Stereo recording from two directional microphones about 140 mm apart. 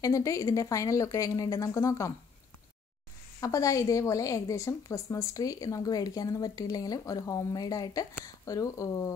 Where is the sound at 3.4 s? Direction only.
25° left (ahead or behind).